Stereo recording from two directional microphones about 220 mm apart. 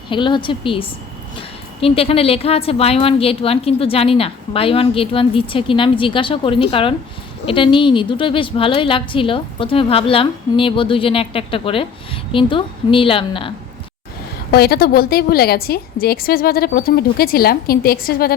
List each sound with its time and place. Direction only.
0.1 s a woman's voice: 20° left (ahead or behind)
14.5 s a woman's voice: 45° left (ahead or behind)